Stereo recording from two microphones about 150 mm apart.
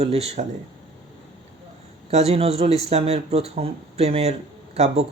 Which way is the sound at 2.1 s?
45° right (ahead or behind).